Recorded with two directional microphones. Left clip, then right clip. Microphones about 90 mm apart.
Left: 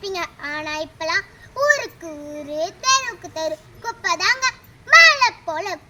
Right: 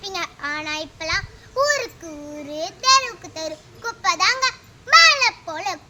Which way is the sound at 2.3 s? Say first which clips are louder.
Left 4 dB; 30° right (ahead or behind).